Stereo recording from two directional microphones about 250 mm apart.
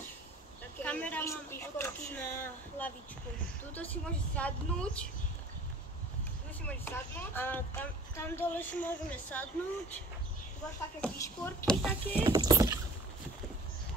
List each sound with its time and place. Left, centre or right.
0.8 s a woman's voice: centre
6.6 s speech: centre
11.0 s a woman's voice: centre
12.2 s speech: centre